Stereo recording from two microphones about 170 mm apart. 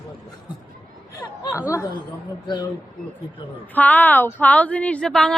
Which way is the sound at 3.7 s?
10° left (ahead or behind).